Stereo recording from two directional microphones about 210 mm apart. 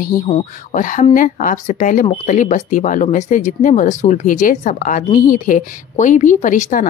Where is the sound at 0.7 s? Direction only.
40° left (ahead or behind).